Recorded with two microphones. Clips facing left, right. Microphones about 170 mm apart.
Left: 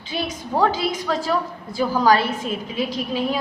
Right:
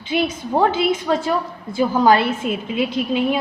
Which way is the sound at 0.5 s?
25° right (ahead or behind).